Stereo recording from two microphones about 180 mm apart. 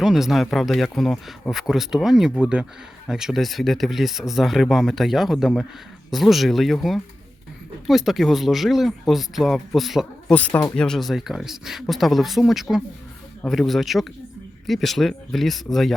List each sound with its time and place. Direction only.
0.0 s speech: centre (ahead or behind)